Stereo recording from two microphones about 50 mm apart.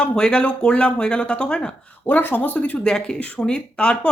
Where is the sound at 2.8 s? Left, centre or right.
Centre.